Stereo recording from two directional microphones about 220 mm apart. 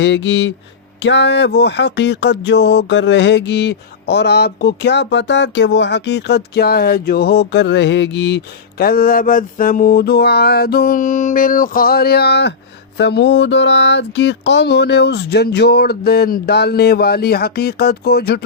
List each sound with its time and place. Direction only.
0.0 s speech: 55° left (ahead or behind)
8.8 s speech: 45° left (ahead or behind)